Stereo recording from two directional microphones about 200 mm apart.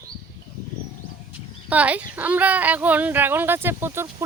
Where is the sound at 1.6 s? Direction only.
5° right (ahead or behind).